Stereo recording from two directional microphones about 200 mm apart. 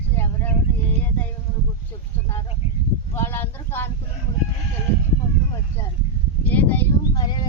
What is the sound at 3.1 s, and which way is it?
Speech, 10° left (ahead or behind).